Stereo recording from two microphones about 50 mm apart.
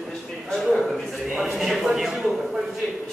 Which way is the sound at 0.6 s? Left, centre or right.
Centre.